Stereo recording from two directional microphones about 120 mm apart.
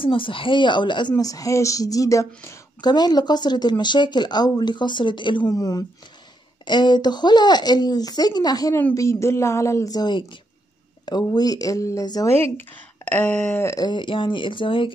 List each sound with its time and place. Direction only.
0.0 s speech: 45° left (ahead or behind)
1.1 s speech: 30° left (ahead or behind)
2.8 s speech: 35° left (ahead or behind)
5.5 s speech: 30° left (ahead or behind)
12.4 s speech: 55° right (ahead or behind)
13.0 s a sound: 10° left (ahead or behind)
13.7 s speech: 40° left (ahead or behind)